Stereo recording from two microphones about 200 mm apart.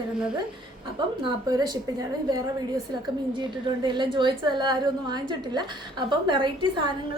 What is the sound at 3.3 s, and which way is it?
A woman's voice, 25° right (ahead or behind).